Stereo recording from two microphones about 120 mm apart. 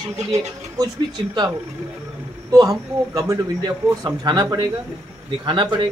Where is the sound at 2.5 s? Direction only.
30° right (ahead or behind).